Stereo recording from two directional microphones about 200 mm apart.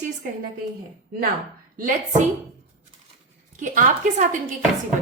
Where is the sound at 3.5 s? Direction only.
40° right (ahead or behind).